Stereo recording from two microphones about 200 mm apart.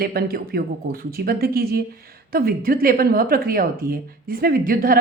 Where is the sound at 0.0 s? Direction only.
50° right (ahead or behind).